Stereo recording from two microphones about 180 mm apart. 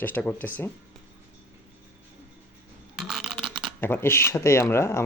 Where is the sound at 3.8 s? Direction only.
10° left (ahead or behind).